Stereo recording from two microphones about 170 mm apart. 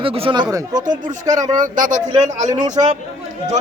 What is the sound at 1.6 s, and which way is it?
Speech, 55° right (ahead or behind).